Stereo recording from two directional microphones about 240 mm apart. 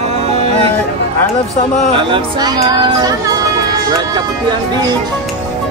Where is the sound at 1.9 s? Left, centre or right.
Right.